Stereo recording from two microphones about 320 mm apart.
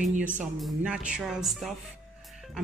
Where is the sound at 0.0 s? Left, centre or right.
Right.